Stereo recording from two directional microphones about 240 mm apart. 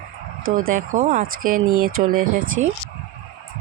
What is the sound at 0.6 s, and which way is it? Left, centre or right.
A man's voice, right.